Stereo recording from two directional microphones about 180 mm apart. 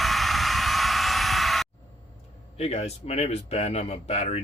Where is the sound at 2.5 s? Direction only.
35° left (ahead or behind).